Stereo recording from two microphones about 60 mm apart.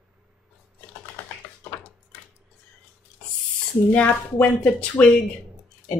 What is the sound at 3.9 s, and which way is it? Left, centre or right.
A woman's voice, left.